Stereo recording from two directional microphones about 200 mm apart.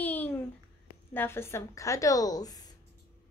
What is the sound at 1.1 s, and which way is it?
A woman's voice, 10° left (ahead or behind).